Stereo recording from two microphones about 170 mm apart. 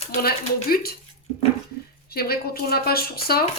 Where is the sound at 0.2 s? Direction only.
65° left (ahead or behind).